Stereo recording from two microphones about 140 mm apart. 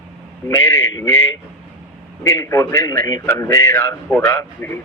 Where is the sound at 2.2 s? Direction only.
20° left (ahead or behind).